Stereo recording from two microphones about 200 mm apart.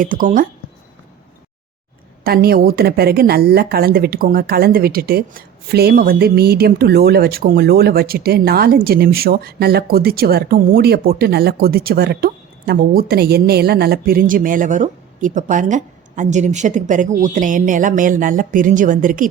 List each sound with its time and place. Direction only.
0.0 s speech: 40° right (ahead or behind)
2.2 s a woman's voice: 50° right (ahead or behind)